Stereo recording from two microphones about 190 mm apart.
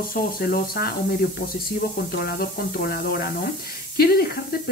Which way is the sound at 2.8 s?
55° left (ahead or behind).